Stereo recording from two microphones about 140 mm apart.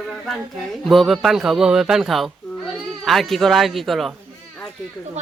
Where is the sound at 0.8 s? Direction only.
Centre (ahead or behind).